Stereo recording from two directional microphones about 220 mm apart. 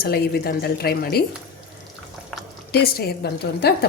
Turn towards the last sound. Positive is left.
turn(degrees=45)  # may be behind; listen again after turning